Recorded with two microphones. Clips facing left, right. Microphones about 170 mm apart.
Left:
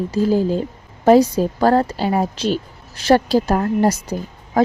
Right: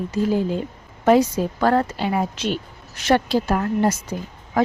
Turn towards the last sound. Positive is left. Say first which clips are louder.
# left 3 dB
turn(degrees=35)  # may be behind; listen again after turning